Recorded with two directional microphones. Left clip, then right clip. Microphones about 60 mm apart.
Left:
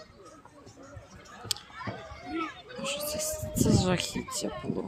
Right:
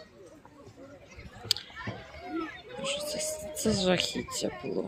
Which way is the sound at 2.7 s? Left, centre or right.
Left.